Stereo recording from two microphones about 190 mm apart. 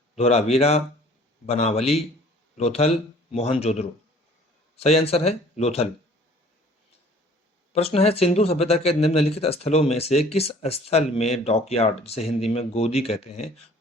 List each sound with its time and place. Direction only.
0.2 s speech: 35° left (ahead or behind)
7.7 s speech: 30° left (ahead or behind)